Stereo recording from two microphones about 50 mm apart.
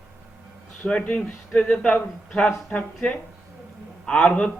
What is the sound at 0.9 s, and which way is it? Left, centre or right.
A man's voice, left.